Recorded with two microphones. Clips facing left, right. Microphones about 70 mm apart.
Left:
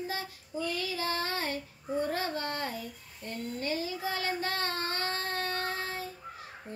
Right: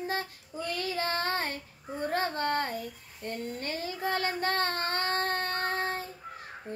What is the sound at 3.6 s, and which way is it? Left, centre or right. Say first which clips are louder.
Child singing: left 1 dB; right.